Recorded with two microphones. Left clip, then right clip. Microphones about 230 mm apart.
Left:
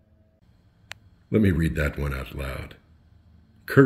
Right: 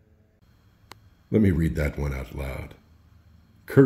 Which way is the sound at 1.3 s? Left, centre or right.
Centre.